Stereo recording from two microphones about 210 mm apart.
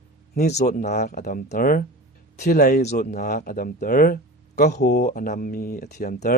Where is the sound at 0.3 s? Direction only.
35° left (ahead or behind).